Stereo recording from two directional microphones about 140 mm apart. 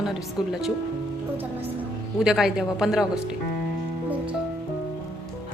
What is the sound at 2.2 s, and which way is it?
Speech, 5° right (ahead or behind).